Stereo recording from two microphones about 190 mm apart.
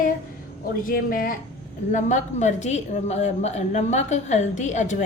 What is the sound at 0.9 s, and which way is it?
A woman's voice, 50° left (ahead or behind).